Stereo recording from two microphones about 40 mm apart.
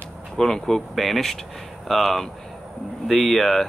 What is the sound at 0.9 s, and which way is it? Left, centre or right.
Speech, centre.